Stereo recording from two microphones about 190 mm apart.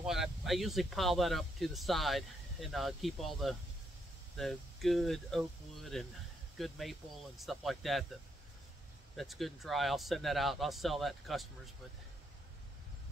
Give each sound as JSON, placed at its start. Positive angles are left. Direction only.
{"t": 0.0, "sound": "speech", "side_deg": 0}